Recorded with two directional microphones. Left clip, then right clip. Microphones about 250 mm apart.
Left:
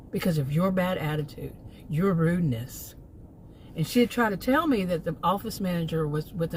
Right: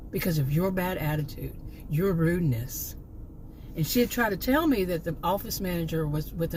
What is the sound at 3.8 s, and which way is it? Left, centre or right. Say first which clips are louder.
Speech: left 1 dB; centre.